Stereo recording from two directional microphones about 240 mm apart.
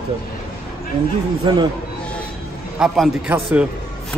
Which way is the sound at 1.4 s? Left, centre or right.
Right.